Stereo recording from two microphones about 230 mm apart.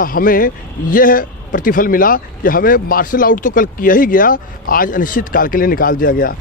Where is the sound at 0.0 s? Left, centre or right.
Left.